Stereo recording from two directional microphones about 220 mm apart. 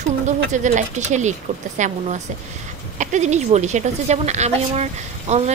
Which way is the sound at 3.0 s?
30° right (ahead or behind).